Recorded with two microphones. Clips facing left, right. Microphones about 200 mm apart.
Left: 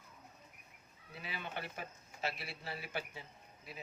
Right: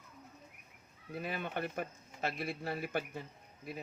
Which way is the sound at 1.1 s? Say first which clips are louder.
Right 7 dB; 50° right (ahead or behind).